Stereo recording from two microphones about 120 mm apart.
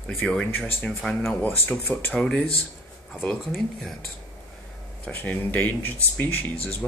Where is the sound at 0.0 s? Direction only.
10° left (ahead or behind).